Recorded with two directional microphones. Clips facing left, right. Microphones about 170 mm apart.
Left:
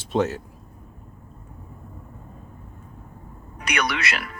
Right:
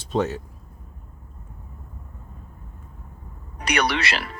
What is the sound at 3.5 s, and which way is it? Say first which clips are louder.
Speech: right 3 dB; 35° right (ahead or behind).